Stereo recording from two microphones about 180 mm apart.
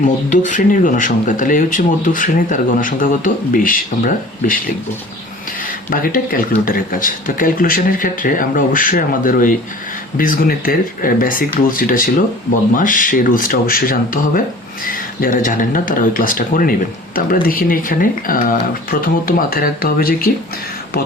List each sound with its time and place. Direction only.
0.0 s speech: 45° left (ahead or behind)